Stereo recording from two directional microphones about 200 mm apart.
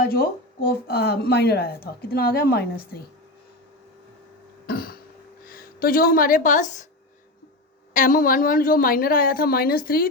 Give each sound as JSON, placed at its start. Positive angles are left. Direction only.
{"t": 0.0, "sound": "a woman's voice", "side_deg": 50}
{"t": 4.6, "sound": "cough", "side_deg": 50}
{"t": 5.5, "sound": "a woman's voice", "side_deg": 50}
{"t": 7.9, "sound": "a woman's voice", "side_deg": 40}